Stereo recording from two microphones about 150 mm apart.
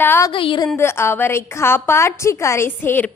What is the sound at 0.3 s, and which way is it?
Speech, 35° left (ahead or behind).